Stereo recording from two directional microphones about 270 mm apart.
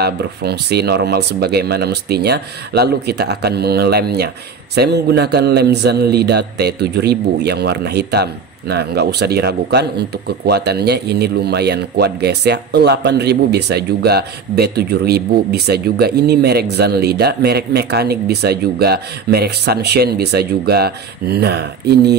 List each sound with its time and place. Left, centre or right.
0.0 s a man's voice: right